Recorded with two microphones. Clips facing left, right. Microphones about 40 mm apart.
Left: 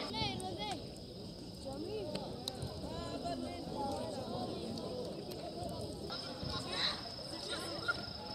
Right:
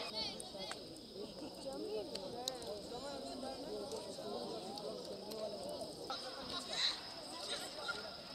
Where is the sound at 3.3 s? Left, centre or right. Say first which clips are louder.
Left 4 dB; left.